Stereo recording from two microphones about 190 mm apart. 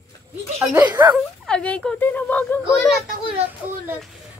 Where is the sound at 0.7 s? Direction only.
10° right (ahead or behind).